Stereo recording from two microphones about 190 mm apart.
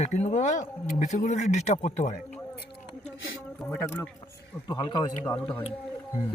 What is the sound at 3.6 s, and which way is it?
Speech, 10° left (ahead or behind).